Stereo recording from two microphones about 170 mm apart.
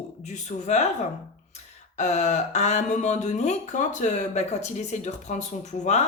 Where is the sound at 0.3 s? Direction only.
45° left (ahead or behind).